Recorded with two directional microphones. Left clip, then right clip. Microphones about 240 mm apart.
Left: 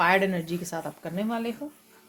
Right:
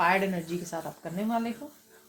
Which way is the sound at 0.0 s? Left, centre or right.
Left.